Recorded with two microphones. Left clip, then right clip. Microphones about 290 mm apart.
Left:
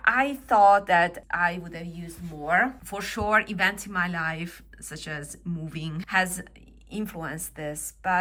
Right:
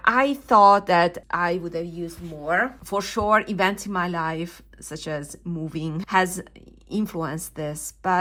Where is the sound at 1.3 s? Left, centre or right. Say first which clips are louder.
Right 2 dB; centre.